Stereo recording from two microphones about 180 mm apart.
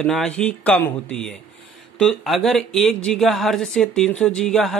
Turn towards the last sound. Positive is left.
turn(degrees=0)  # may be behind; listen again after turning